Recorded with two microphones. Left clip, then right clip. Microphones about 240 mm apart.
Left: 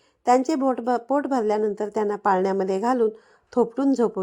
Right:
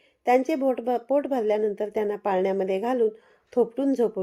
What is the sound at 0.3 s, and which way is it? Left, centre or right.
Speech, left.